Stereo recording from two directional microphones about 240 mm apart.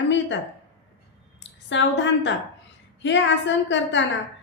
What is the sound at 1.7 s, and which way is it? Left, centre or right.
A woman's voice, left.